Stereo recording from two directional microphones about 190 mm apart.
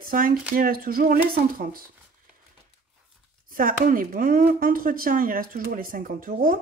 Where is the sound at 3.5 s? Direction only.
50° right (ahead or behind).